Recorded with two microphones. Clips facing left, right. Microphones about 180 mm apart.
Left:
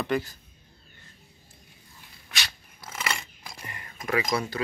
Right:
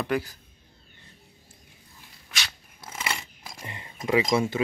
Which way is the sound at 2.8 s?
25° right (ahead or behind).